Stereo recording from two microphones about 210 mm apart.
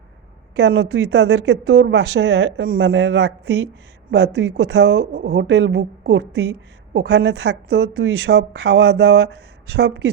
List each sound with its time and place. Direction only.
0.5 s a woman's voice: 55° right (ahead or behind)